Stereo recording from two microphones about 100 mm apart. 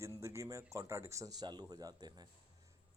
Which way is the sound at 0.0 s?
30° right (ahead or behind).